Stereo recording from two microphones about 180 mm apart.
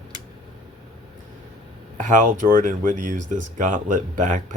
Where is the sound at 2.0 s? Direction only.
50° right (ahead or behind).